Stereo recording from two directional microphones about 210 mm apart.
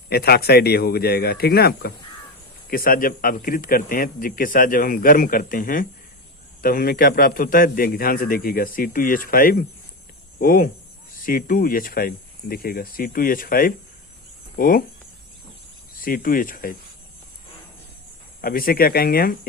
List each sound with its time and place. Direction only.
0.1 s a man's voice: 50° left (ahead or behind)
16.0 s a man's voice: 40° left (ahead or behind)
18.4 s a man's voice: 45° left (ahead or behind)